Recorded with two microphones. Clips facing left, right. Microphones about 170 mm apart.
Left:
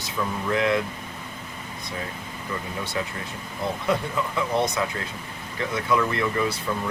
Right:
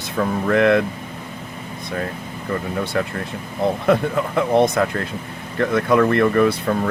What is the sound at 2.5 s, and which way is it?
Speech, 60° right (ahead or behind).